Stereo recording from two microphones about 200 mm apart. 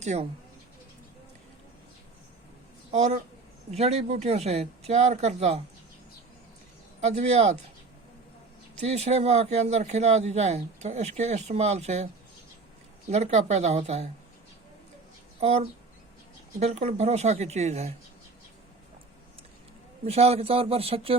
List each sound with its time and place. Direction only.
0.0 s speech: 35° right (ahead or behind)
2.9 s speech: 35° right (ahead or behind)
7.0 s speech: 35° right (ahead or behind)
8.8 s speech: 35° right (ahead or behind)
13.1 s speech: 35° right (ahead or behind)
15.4 s speech: 30° right (ahead or behind)
20.1 s a man's voice: 30° right (ahead or behind)